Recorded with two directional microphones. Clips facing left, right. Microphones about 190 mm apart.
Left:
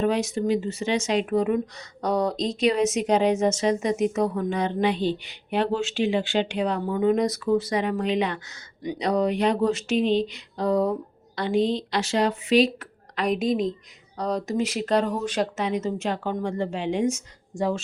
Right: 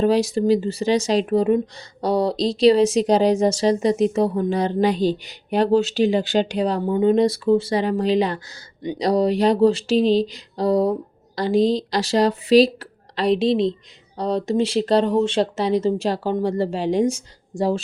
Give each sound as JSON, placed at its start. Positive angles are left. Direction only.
{"t": 0.0, "sound": "speech", "side_deg": -35}